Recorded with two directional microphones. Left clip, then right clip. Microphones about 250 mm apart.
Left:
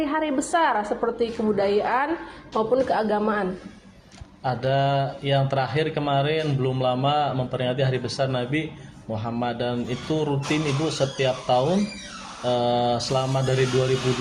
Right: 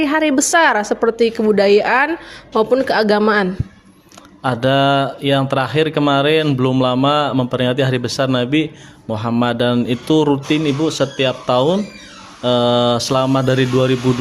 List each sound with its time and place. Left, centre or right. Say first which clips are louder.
0.0 s speech: right 9 dB; right
4.4 s speech: right 8 dB; right